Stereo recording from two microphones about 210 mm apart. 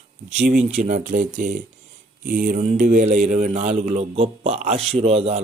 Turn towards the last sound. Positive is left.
turn(degrees=-30)  # may be behind; listen again after turning